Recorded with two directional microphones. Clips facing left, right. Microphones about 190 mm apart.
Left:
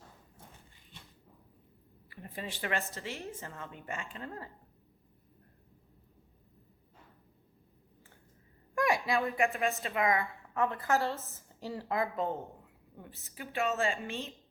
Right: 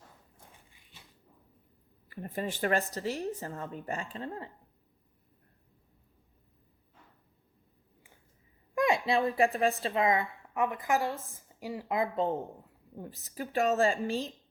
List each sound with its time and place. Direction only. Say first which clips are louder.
2.0 s speech: right 7 dB; 50° right (ahead or behind)
2.9 s a woman's voice: right 7 dB; 40° right (ahead or behind)
8.7 s a sound: right 2 dB; 20° right (ahead or behind)
9.0 s a woman's voice: right 3 dB; 30° right (ahead or behind)
12.2 s speech: right 4 dB; centre (ahead or behind)
13.2 s a woman's voice: right 5 dB; 40° right (ahead or behind)